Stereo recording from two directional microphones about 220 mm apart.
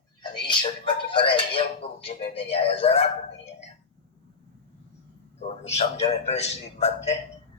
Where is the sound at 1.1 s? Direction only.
25° left (ahead or behind).